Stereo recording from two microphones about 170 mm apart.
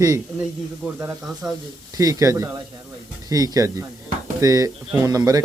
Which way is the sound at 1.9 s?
20° right (ahead or behind).